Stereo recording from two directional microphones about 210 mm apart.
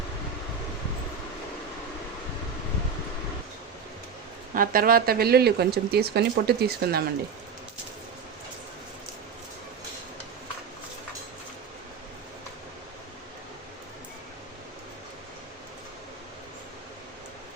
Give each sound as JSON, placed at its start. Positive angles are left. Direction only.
{"t": 4.5, "sound": "speech", "side_deg": -40}